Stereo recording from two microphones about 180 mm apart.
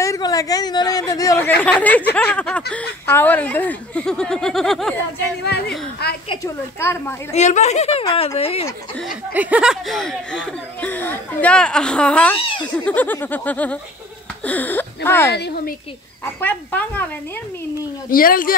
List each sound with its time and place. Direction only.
0.0 s a sound: 20° left (ahead or behind)
1.6 s speech: 10° left (ahead or behind)
5.4 s a woman's voice: 65° left (ahead or behind)
6.4 s speech: 15° left (ahead or behind)
7.3 s speech: 40° left (ahead or behind)
9.3 s speech: 10° right (ahead or behind); by 15.3 s 10° left (ahead or behind)
15.3 s a woman's voice: 65° left (ahead or behind)
16.3 s speech: 10° left (ahead or behind)
18.1 s speech: 50° left (ahead or behind)